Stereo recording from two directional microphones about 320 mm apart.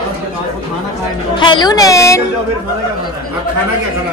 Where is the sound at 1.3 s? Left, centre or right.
Centre.